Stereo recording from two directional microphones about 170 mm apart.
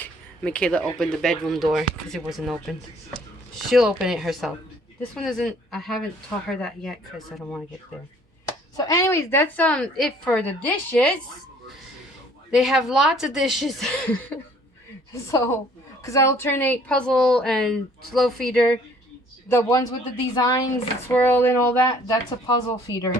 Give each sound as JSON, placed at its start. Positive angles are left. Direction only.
{"t": 0.0, "sound": "a woman's voice", "side_deg": 5}
{"t": 8.7, "sound": "a woman's voice", "side_deg": 20}
{"t": 12.5, "sound": "a woman's voice", "side_deg": 0}
{"t": 16.0, "sound": "a woman's voice", "side_deg": 15}
{"t": 21.1, "sound": "a woman's voice", "side_deg": 10}